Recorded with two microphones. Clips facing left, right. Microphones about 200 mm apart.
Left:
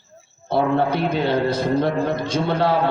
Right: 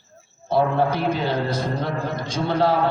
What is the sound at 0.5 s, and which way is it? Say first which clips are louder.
A man's voice: left 1 dB; 60° left (ahead or behind).